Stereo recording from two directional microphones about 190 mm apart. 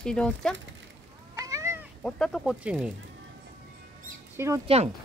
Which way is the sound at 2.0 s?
5° left (ahead or behind).